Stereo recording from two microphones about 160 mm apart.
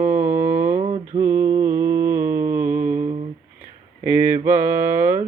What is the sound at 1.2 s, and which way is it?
Mantra, 15° right (ahead or behind).